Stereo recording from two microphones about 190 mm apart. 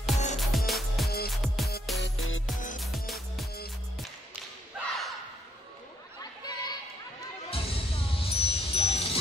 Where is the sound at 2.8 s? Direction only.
Centre (ahead or behind).